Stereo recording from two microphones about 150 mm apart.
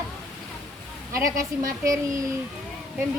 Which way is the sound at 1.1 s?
20° right (ahead or behind).